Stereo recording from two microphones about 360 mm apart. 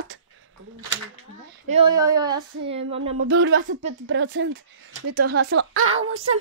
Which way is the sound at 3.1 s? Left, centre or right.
Right.